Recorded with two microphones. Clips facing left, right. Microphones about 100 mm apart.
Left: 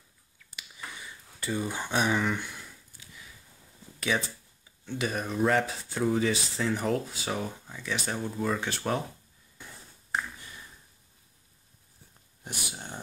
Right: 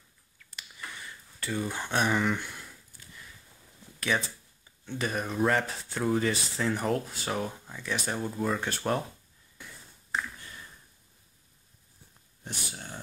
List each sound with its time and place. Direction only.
1.0 s a sound: 10° left (ahead or behind)
4.1 s speech: centre (ahead or behind)
12.4 s speech: 20° left (ahead or behind)